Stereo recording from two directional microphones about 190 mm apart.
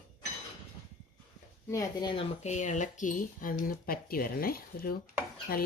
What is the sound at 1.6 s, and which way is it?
Speech, 15° left (ahead or behind).